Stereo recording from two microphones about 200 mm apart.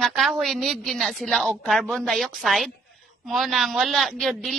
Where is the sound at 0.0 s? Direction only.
Centre (ahead or behind).